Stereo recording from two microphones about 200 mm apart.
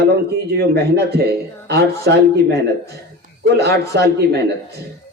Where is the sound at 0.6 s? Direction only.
55° right (ahead or behind).